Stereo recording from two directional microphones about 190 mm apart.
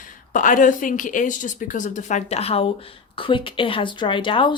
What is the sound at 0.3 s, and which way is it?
Speech, 45° left (ahead or behind).